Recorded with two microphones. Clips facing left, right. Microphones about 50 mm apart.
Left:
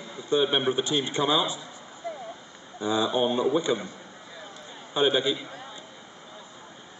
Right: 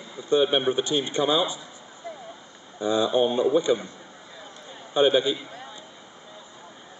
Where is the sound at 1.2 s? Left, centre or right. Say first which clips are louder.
Right 2 dB; centre.